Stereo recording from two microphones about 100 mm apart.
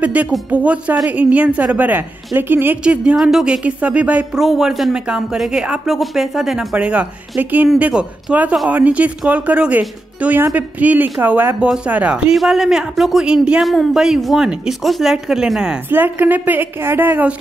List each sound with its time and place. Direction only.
0.0 s speech: 15° right (ahead or behind)
15.9 s a woman's voice: 20° right (ahead or behind)